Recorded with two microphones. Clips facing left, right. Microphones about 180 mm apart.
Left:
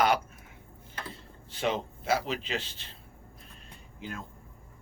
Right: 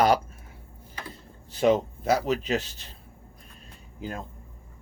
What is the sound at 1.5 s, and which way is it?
Speech, 40° right (ahead or behind).